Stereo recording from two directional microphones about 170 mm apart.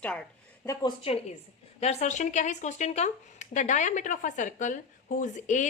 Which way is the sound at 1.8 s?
40° left (ahead or behind).